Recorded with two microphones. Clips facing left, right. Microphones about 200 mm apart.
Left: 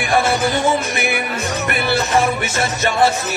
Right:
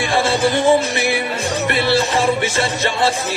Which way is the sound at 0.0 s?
30° right (ahead or behind).